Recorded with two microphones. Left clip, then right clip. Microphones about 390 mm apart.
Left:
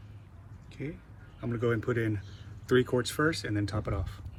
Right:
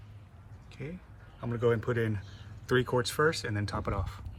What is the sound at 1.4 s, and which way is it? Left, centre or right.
Speech, centre.